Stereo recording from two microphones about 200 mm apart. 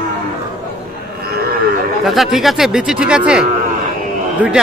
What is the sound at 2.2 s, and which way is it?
Speech, centre (ahead or behind).